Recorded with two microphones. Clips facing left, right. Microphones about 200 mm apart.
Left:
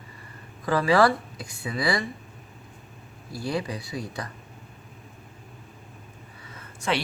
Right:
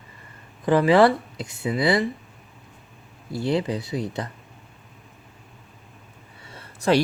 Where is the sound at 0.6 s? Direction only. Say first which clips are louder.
Right 4 dB; 20° right (ahead or behind).